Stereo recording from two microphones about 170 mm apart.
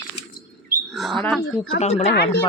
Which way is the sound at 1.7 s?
40° left (ahead or behind).